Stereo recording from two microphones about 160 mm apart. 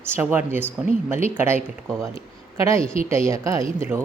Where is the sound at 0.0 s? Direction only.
15° right (ahead or behind).